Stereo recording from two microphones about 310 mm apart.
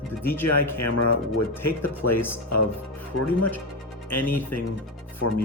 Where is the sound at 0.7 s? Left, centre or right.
Left.